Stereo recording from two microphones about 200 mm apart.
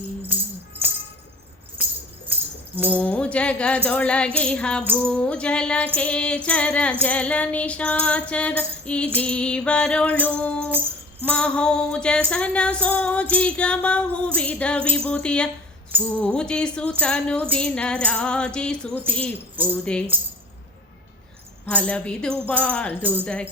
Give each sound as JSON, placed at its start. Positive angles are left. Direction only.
{"t": 0.3, "sound": "music", "side_deg": -10}
{"t": 1.8, "sound": "music", "side_deg": -10}
{"t": 2.9, "sound": "music", "side_deg": 5}
{"t": 21.7, "sound": "music", "side_deg": 5}